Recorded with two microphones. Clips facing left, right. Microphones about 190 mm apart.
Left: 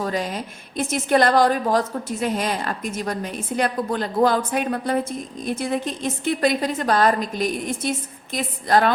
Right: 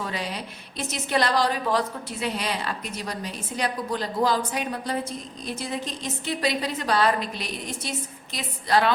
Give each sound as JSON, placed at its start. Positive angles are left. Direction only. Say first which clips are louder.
{"t": 0.0, "sound": "a woman's voice", "louder": "left 6 dB", "side_deg": 45}